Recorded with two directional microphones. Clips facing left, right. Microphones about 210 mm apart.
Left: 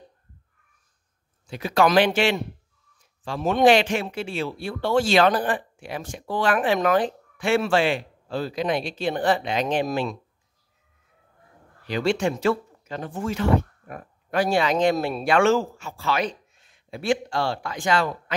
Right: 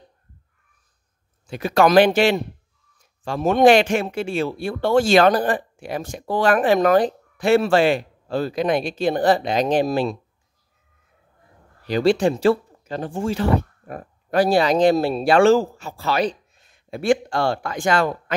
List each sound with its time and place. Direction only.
1.5 s speech: 50° right (ahead or behind)
11.8 s speech: 35° right (ahead or behind)